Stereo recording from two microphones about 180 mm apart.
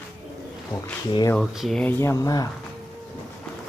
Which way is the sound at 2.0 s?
15° left (ahead or behind).